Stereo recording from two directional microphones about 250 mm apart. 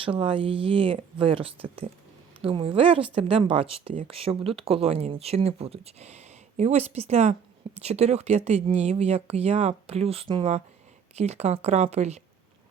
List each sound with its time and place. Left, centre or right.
0.0 s speech: right